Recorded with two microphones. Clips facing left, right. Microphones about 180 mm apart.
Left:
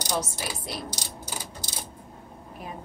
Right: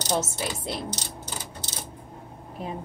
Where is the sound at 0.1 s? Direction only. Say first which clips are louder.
Right 3 dB; 25° right (ahead or behind).